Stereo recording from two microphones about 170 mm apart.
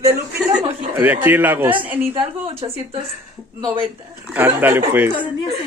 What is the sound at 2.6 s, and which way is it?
Speech, 25° right (ahead or behind).